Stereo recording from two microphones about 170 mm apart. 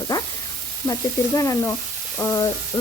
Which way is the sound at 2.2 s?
15° left (ahead or behind).